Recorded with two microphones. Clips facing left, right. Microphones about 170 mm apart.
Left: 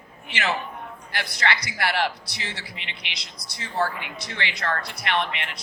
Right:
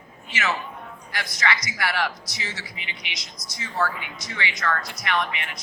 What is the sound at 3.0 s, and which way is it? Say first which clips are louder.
Speech: right 1 dB; 60° left (ahead or behind).